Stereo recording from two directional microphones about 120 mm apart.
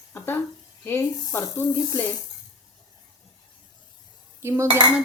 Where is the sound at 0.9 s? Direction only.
20° left (ahead or behind).